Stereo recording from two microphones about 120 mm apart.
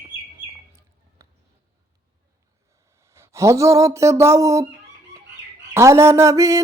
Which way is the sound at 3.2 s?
25° right (ahead or behind).